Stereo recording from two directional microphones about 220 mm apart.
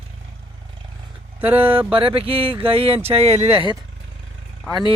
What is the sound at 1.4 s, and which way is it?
Speech, 10° right (ahead or behind).